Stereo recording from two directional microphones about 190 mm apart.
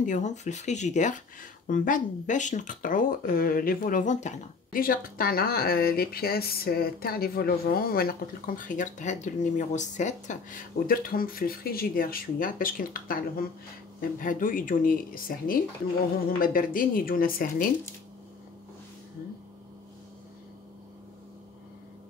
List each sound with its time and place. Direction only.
0.0 s speech: 40° left (ahead or behind)
14.2 s speech: 45° left (ahead or behind)